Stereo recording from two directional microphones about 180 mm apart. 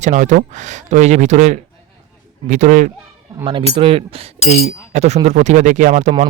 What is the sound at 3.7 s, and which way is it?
Speech, 30° right (ahead or behind).